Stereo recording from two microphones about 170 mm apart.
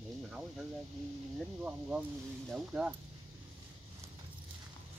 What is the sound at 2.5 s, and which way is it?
Speech, 5° right (ahead or behind).